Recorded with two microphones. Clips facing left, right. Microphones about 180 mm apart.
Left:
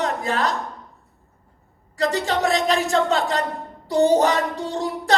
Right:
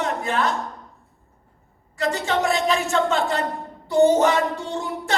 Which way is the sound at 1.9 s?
35° left (ahead or behind).